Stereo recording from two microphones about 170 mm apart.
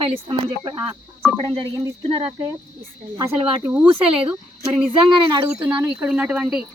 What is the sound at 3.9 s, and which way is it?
Speech, 30° right (ahead or behind).